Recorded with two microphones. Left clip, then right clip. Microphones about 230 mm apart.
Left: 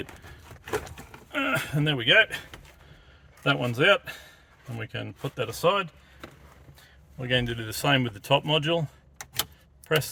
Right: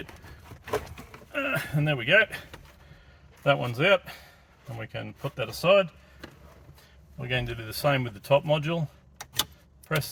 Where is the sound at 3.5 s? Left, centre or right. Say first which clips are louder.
Left 1 dB; left.